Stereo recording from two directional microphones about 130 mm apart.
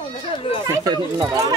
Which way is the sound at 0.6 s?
25° right (ahead or behind).